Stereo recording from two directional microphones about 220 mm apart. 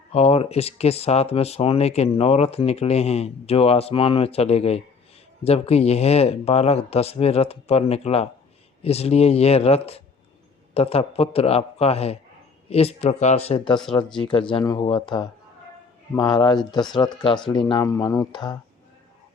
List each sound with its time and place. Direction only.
0.1 s speech: 30° left (ahead or behind)